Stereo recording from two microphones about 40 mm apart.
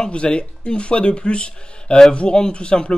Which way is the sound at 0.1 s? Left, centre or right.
Left.